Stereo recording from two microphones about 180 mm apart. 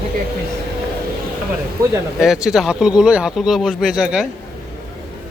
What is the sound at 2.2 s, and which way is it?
Speech, 5° right (ahead or behind).